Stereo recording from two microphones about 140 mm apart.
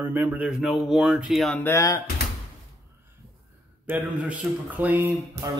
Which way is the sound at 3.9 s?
10° right (ahead or behind).